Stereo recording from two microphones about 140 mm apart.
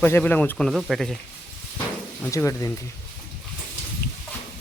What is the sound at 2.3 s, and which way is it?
Speech, 20° left (ahead or behind).